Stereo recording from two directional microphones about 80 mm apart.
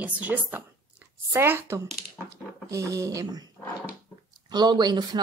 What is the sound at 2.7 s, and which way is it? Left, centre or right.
Speech, right.